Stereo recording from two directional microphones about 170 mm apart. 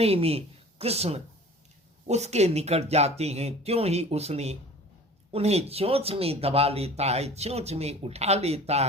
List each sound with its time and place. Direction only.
0.0 s speech: 35° right (ahead or behind)